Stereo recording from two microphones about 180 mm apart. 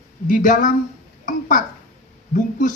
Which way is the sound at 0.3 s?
45° left (ahead or behind).